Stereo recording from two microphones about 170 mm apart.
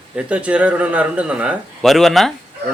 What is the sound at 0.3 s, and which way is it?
Speech, 10° right (ahead or behind).